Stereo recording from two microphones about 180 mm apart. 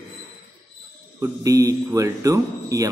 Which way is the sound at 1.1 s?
20° right (ahead or behind).